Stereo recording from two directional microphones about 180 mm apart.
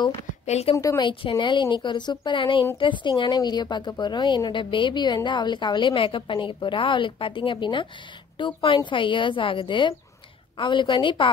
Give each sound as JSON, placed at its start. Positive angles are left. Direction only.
{"t": 0.5, "sound": "a woman's voice", "side_deg": 35}
{"t": 0.7, "sound": "a woman's voice", "side_deg": 20}